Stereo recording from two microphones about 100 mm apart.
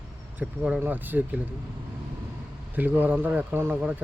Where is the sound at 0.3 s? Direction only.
10° right (ahead or behind).